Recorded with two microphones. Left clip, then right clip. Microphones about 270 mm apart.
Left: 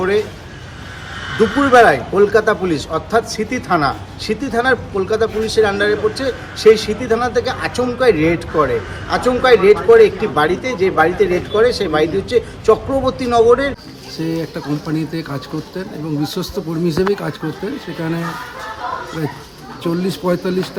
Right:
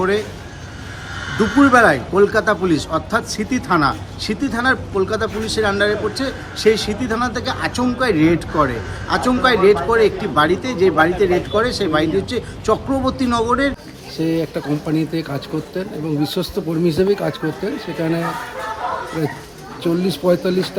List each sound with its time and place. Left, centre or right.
1.3 s speech: right
1.7 s a man's voice: centre
14.3 s speech: centre
19.8 s speech: centre